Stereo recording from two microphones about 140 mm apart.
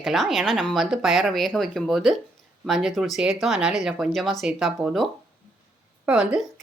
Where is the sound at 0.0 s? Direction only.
Centre (ahead or behind).